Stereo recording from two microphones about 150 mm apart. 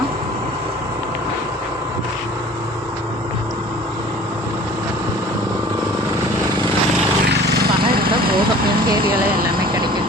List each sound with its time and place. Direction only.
7.3 s vehicle: 90° right